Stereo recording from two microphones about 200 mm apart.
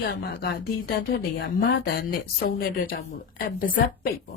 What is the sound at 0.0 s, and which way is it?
A woman's voice, 55° left (ahead or behind).